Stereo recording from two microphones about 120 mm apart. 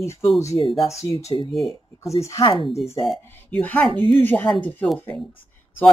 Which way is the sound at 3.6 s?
15° left (ahead or behind).